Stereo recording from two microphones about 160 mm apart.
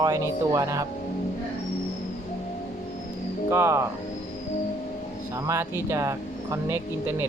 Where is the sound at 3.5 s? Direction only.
15° right (ahead or behind).